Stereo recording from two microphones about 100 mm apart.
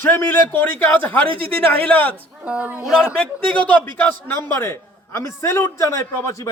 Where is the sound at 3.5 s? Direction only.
15° left (ahead or behind).